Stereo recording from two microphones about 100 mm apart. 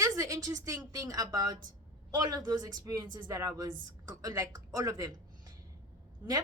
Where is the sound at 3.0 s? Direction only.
50° right (ahead or behind).